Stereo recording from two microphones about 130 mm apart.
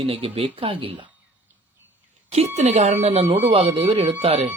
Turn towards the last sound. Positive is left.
turn(degrees=-50)  # may be behind; listen again after turning